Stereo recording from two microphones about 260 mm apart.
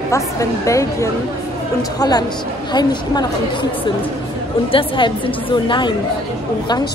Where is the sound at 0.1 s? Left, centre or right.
Centre.